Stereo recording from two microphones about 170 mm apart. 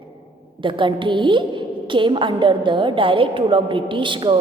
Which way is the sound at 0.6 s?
30° right (ahead or behind).